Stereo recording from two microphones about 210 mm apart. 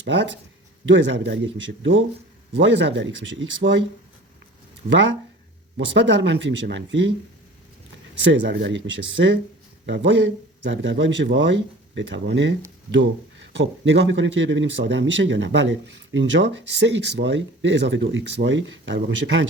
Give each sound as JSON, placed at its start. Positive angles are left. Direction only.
{"t": 0.0, "sound": "speech", "side_deg": -60}
{"t": 4.8, "sound": "speech", "side_deg": -35}
{"t": 5.7, "sound": "speech", "side_deg": -60}
{"t": 8.3, "sound": "speech", "side_deg": -60}
{"t": 13.6, "sound": "speech", "side_deg": -60}